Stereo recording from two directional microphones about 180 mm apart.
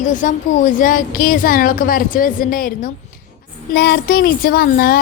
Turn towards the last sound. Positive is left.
turn(degrees=55)  # may be behind; listen again after turning